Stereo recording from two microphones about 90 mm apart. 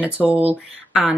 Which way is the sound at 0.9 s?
5° right (ahead or behind).